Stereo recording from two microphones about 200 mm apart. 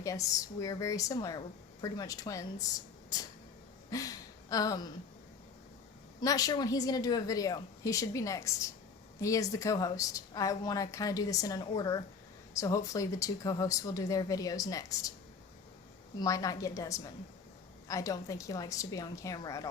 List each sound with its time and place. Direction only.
0.0 s a woman's voice: 15° left (ahead or behind)
6.1 s a woman's voice: 20° left (ahead or behind)
16.1 s a woman's voice: 15° left (ahead or behind)